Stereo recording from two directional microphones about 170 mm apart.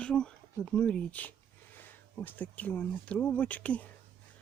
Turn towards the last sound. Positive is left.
turn(degrees=10)  # may be behind; listen again after turning